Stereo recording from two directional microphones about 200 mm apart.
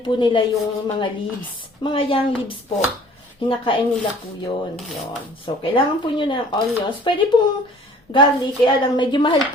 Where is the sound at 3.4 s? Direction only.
25° left (ahead or behind).